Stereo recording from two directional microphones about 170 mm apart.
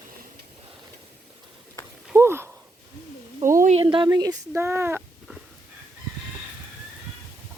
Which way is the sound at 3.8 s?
30° right (ahead or behind).